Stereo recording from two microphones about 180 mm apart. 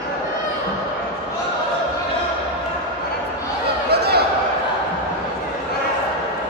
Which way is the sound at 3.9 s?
65° right (ahead or behind).